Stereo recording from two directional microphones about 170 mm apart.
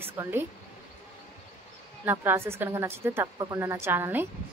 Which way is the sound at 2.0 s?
15° right (ahead or behind).